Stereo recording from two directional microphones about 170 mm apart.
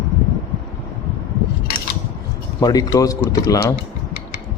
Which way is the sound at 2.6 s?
20° left (ahead or behind).